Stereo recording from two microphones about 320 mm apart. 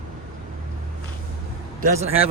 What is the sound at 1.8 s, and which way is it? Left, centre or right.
Speech, right.